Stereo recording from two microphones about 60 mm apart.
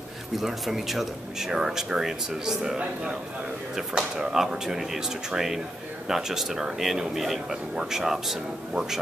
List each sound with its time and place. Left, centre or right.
0.4 s speech: centre